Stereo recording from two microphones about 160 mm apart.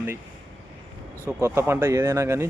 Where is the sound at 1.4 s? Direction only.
15° right (ahead or behind).